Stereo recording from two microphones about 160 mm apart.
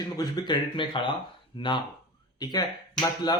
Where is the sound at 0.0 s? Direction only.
25° left (ahead or behind).